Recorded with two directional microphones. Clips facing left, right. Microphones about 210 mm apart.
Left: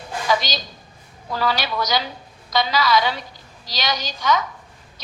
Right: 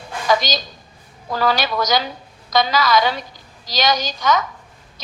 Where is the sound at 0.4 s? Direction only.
45° right (ahead or behind).